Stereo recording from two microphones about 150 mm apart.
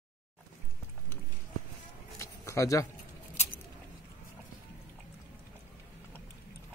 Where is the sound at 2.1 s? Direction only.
20° left (ahead or behind).